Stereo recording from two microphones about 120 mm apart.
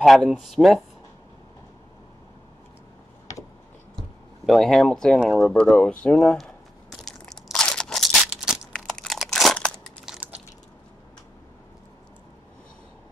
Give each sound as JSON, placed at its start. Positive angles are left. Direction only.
{"t": 0.0, "sound": "speech", "side_deg": 0}
{"t": 4.5, "sound": "speech", "side_deg": 5}
{"t": 5.7, "sound": "crumpling", "side_deg": 10}